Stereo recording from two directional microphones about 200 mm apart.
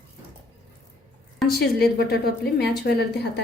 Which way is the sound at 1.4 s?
50° left (ahead or behind).